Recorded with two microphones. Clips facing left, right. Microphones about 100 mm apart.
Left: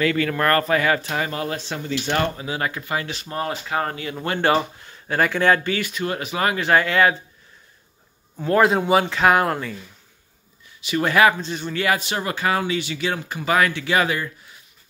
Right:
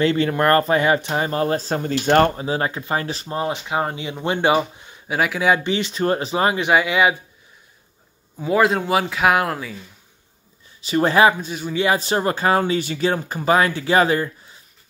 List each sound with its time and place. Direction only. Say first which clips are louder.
0.0 s speech: right 3 dB; 25° right (ahead or behind); by 2.3 s 45° right (ahead or behind)
2.3 s speech: right 4 dB; 30° right (ahead or behind)
3.3 s speech: right 2 dB; 20° right (ahead or behind)
5.6 s speech: right 3 dB; 25° right (ahead or behind)
8.4 s speech: even; 5° right (ahead or behind)
10.8 s speech: right 2 dB; 30° right (ahead or behind)
11.3 s speech: even; 5° right (ahead or behind)
11.7 s speech: right 3 dB; 20° right (ahead or behind)
12.0 s speech: right 5 dB; 35° right (ahead or behind)